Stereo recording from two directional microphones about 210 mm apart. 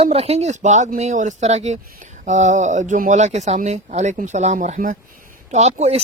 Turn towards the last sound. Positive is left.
turn(degrees=-30)  # may be behind; listen again after turning